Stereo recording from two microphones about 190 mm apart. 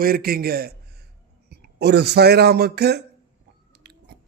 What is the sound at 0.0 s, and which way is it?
A man's voice, 50° right (ahead or behind).